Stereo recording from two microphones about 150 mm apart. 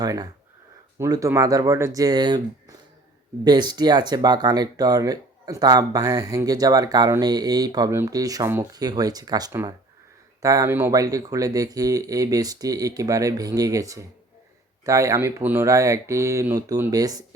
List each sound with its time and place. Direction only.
0.0 s speech: 25° right (ahead or behind)